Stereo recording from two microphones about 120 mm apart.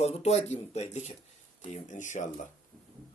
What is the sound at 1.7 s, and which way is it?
Speech, 90° left.